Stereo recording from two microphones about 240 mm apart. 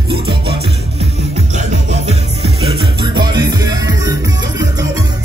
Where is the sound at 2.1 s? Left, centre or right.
Right.